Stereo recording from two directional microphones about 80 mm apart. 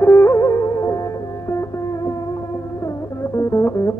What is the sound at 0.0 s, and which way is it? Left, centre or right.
Music, left.